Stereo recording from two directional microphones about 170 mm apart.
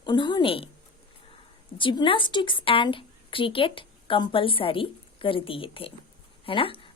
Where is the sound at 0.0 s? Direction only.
25° left (ahead or behind).